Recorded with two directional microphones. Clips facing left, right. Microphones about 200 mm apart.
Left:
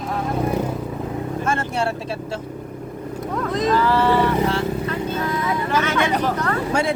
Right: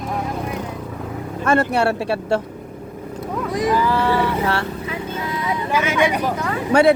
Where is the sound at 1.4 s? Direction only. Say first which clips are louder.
Right 8 dB; 65° right (ahead or behind).